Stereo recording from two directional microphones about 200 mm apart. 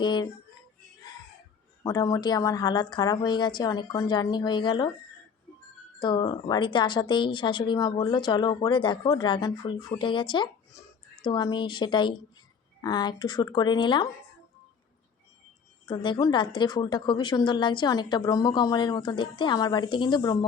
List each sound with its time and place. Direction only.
0.0 s music: 20° left (ahead or behind)
1.8 s speech: 20° left (ahead or behind)
6.0 s speech: 20° left (ahead or behind)
15.9 s speech: 25° left (ahead or behind)